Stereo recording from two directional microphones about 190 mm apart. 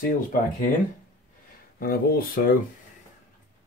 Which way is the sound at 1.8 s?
50° left (ahead or behind).